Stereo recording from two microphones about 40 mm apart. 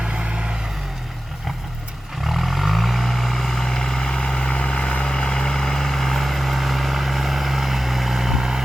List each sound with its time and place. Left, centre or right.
0.0 s vehicle: right
2.2 s vehicle: centre